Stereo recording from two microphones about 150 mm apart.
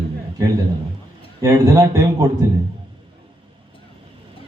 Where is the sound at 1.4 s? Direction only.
20° right (ahead or behind).